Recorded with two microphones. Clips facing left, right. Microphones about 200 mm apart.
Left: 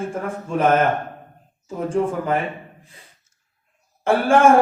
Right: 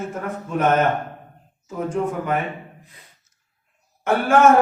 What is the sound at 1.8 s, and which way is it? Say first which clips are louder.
Speech: left 3 dB; 30° left (ahead or behind).